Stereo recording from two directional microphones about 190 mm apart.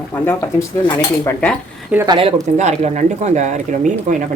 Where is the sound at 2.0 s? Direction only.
30° right (ahead or behind).